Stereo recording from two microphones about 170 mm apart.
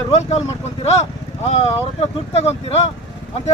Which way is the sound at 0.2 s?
40° left (ahead or behind).